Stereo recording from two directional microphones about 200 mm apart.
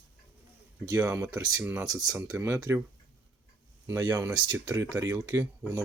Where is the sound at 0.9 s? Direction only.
15° right (ahead or behind).